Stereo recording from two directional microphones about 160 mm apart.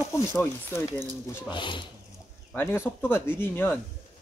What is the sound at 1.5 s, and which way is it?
Speech, 30° left (ahead or behind).